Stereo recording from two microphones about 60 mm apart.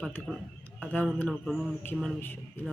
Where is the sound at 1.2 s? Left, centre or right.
Centre.